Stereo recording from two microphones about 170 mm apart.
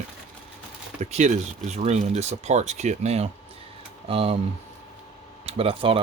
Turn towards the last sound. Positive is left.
turn(degrees=-35)  # may be behind; listen again after turning